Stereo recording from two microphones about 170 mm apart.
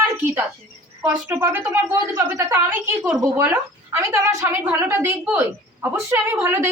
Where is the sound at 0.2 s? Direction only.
10° right (ahead or behind).